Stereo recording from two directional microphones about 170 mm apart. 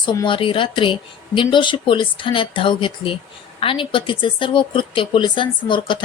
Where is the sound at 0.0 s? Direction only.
25° left (ahead or behind).